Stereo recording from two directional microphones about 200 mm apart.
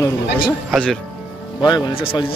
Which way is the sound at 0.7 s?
Centre (ahead or behind).